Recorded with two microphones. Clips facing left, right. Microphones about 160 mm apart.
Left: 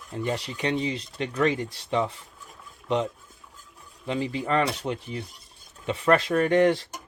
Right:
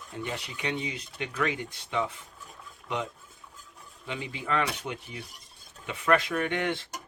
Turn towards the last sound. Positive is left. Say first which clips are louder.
# left 9 dB
turn(degrees=40)  # may be behind; listen again after turning